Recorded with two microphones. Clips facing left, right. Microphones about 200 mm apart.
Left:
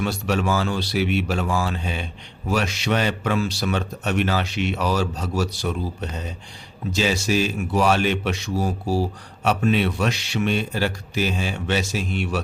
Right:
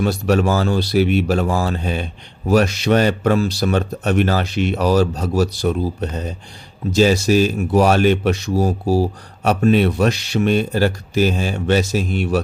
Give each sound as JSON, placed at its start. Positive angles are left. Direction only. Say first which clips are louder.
{"t": 0.0, "sound": "speech", "louder": "right 6 dB", "side_deg": -40}